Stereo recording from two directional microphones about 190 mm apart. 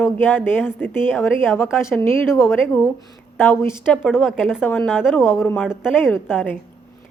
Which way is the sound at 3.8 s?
5° right (ahead or behind).